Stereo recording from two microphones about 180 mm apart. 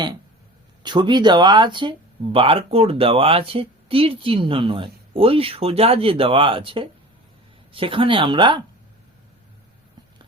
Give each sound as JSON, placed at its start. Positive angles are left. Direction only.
{"t": 0.8, "sound": "speech", "side_deg": -25}